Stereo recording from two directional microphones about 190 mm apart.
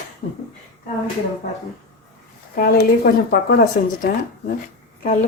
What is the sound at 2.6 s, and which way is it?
Speech, 55° left (ahead or behind).